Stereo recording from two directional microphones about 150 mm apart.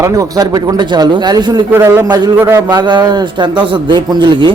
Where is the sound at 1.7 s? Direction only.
15° right (ahead or behind).